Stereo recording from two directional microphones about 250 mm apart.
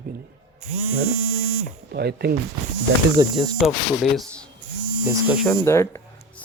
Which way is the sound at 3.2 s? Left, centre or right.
Centre.